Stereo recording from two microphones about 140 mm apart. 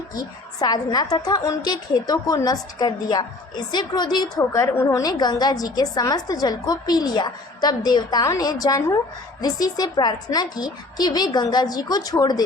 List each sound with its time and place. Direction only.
0.1 s a woman's voice: 30° left (ahead or behind)